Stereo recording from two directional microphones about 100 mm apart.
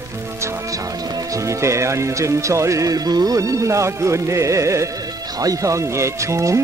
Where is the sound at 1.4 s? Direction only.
30° right (ahead or behind).